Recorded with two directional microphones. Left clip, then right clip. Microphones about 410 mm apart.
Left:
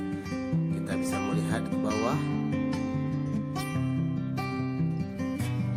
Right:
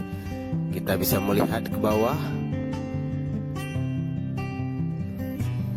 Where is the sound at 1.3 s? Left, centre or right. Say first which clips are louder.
Right 7 dB; right.